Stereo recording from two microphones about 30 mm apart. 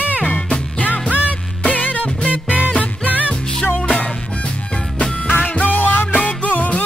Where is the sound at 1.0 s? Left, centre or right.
Right.